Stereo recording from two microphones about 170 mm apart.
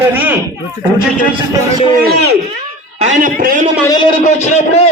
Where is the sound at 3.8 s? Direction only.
25° left (ahead or behind).